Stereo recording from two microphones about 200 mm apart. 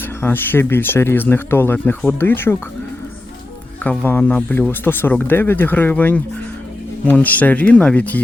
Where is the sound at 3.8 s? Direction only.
10° left (ahead or behind).